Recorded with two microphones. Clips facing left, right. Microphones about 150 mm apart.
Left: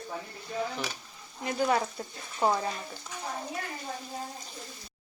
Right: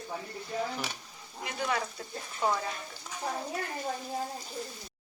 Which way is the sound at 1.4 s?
40° left (ahead or behind).